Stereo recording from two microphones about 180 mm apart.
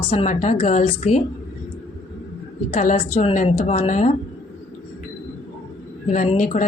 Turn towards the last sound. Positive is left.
turn(degrees=45)  # may be behind; listen again after turning